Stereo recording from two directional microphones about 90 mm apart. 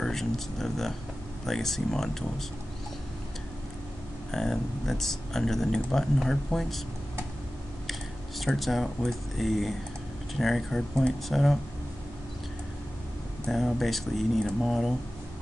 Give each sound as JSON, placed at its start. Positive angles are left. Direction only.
{"t": 0.0, "sound": "speech", "side_deg": 5}
{"t": 4.3, "sound": "speech", "side_deg": 5}
{"t": 8.4, "sound": "speech", "side_deg": 0}
{"t": 13.5, "sound": "speech", "side_deg": 0}